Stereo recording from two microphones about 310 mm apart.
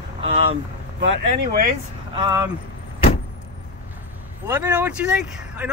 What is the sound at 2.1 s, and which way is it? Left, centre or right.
Speech, centre.